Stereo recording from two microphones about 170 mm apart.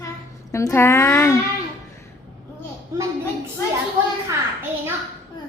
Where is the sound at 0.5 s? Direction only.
15° left (ahead or behind).